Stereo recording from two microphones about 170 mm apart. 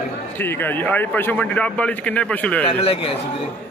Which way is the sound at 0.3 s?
10° left (ahead or behind).